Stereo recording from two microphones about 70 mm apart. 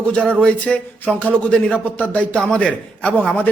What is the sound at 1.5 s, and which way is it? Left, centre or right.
A man's voice, centre.